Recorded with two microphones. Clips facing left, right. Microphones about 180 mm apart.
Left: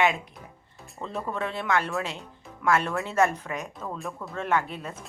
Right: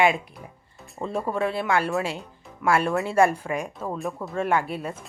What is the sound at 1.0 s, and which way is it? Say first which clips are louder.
Speech: right 6 dB; 25° right (ahead or behind).